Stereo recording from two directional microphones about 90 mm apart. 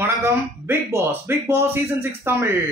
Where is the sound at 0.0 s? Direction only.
30° right (ahead or behind).